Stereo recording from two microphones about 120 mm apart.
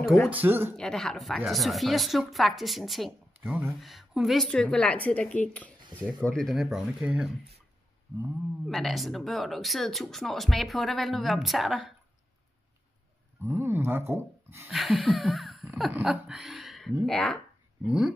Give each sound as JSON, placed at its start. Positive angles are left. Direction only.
{"t": 0.4, "sound": "speech", "side_deg": -20}
{"t": 0.7, "sound": "speech", "side_deg": 5}
{"t": 4.5, "sound": "a woman's voice", "side_deg": 10}
{"t": 8.6, "sound": "speech", "side_deg": 0}
{"t": 13.4, "sound": "speech", "side_deg": -20}
{"t": 14.7, "sound": "speech", "side_deg": 0}
{"t": 17.8, "sound": "speech", "side_deg": -5}